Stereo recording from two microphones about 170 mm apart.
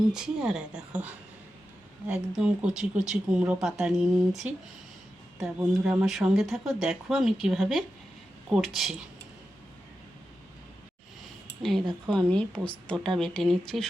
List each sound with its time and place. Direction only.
0.1 s speech: 5° right (ahead or behind)
2.3 s speech: 5° right (ahead or behind)
12.0 s speech: 5° left (ahead or behind)